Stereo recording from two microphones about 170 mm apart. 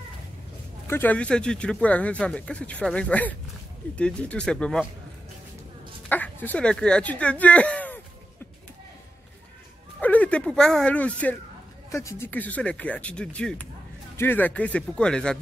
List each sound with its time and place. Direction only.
0.8 s speech: 10° left (ahead or behind)
6.0 s speech: 10° left (ahead or behind)
9.9 s speech: 10° left (ahead or behind)